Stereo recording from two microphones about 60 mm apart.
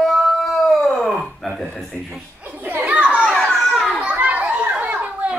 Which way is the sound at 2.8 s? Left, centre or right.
Right.